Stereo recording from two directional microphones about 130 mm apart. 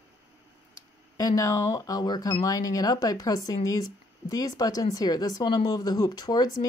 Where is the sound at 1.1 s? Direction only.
25° left (ahead or behind).